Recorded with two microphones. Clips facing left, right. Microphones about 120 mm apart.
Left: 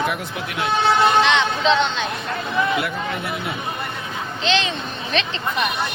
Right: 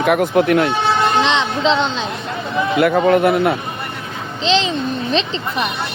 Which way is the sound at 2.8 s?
55° right (ahead or behind).